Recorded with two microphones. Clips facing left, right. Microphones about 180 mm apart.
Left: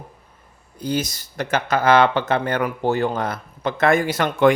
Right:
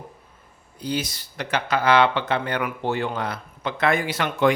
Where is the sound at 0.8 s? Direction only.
45° left (ahead or behind).